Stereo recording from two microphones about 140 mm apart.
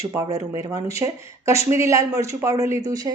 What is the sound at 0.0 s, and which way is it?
Speech, 20° right (ahead or behind).